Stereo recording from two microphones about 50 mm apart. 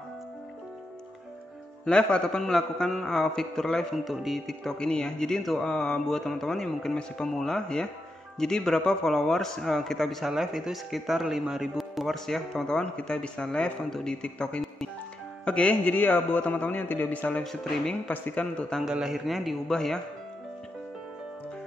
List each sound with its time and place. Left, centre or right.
1.9 s speech: left
3.9 s speech: centre
4.6 s speech: centre
10.3 s speech: centre
12.3 s speech: centre
14.2 s a man's voice: left
17.4 s speech: centre
18.0 s speech: left
18.9 s speech: centre
19.7 s speech: centre